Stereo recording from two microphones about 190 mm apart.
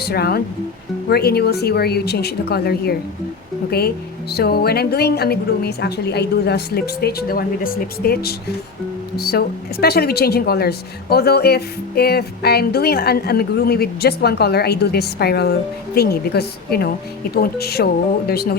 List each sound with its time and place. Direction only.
0.0 s a woman's voice: 55° left (ahead or behind)